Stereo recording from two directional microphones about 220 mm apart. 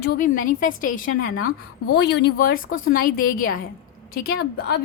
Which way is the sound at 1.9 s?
50° left (ahead or behind).